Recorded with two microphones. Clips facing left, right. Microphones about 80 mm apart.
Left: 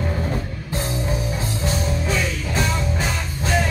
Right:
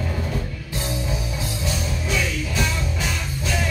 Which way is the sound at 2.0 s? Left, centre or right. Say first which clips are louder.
Left 1 dB; left.